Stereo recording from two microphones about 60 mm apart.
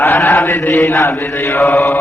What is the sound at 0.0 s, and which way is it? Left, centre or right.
Mantra, left.